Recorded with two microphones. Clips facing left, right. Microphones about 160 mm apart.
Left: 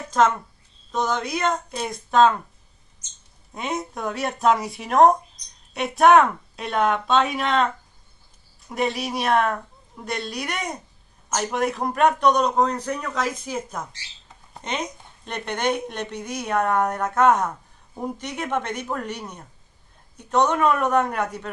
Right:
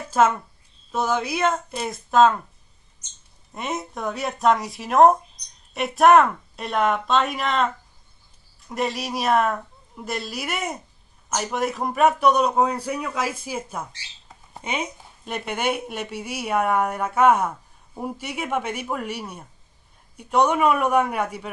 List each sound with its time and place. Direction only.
0.2 s a woman's voice: 5° right (ahead or behind)
3.5 s a woman's voice: centre (ahead or behind)